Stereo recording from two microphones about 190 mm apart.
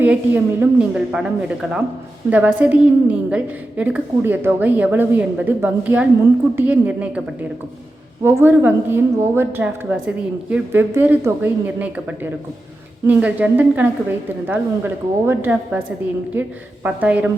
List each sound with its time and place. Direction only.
0.0 s a woman's voice: 10° right (ahead or behind)
8.2 s a woman's voice: 10° right (ahead or behind)